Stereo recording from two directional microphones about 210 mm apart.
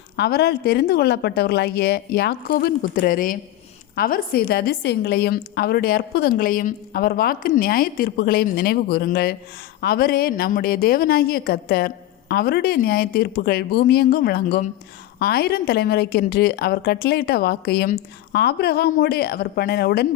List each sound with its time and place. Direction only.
0.2 s a woman's voice: 50° left (ahead or behind)